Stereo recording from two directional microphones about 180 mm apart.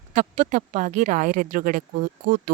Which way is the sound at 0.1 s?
45° right (ahead or behind).